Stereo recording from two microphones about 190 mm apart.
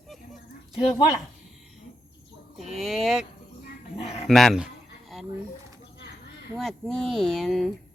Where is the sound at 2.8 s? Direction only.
Centre (ahead or behind).